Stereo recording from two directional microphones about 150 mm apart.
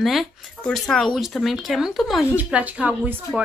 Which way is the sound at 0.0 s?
Centre (ahead or behind).